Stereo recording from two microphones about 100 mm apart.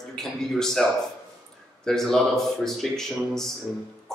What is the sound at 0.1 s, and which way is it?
Speech, 5° left (ahead or behind).